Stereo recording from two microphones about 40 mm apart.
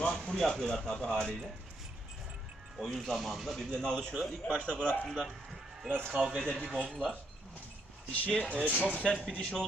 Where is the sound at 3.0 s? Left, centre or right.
Centre.